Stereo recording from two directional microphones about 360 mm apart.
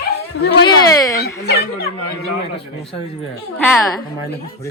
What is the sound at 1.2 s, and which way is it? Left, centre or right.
Dog, left.